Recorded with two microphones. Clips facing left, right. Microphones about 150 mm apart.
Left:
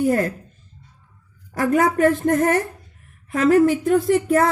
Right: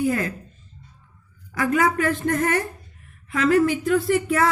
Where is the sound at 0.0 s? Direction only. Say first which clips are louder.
Left 4 dB; 50° left (ahead or behind).